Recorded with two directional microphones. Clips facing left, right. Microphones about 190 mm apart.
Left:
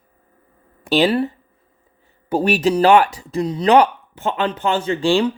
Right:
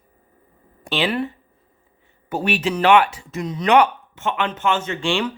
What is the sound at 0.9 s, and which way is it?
Speech, 40° left (ahead or behind).